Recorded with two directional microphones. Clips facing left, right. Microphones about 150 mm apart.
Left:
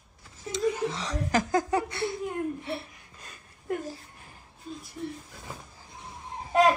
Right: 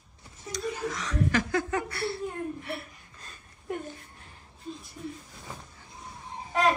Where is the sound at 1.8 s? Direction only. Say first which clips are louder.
Left 1 dB; 15° left (ahead or behind).